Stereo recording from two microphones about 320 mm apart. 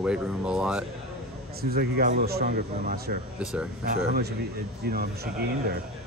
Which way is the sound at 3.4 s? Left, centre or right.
Centre.